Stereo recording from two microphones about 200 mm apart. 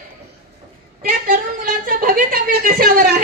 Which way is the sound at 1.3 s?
45° right (ahead or behind).